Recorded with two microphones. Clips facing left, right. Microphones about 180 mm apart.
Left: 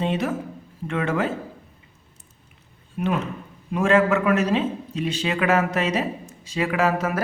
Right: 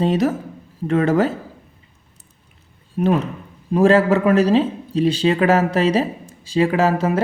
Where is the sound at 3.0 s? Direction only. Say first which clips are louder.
Right 6 dB; 35° right (ahead or behind).